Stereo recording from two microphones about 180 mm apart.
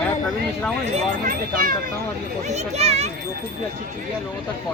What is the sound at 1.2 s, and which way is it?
Speech, 50° right (ahead or behind).